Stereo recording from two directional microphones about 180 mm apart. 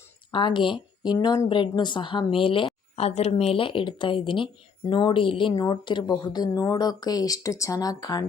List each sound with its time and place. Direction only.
0.3 s speech: 25° left (ahead or behind)